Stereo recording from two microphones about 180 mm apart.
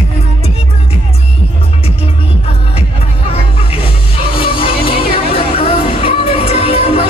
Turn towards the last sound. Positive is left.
turn(degrees=35)  # may be behind; listen again after turning